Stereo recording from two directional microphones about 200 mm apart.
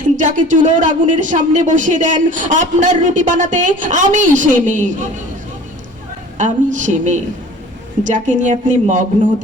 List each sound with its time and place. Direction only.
0.2 s speech: 40° right (ahead or behind)
6.3 s speech: 40° right (ahead or behind)